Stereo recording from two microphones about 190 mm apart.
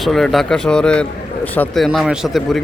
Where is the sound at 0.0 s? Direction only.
Centre (ahead or behind).